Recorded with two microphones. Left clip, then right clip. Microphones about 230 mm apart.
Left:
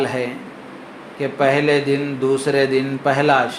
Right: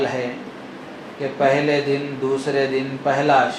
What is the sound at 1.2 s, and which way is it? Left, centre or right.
A man's voice, left.